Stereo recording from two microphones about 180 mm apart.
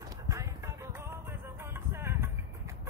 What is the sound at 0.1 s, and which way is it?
Music, 20° right (ahead or behind).